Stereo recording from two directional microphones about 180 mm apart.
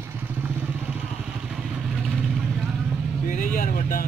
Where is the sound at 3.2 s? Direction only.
50° left (ahead or behind).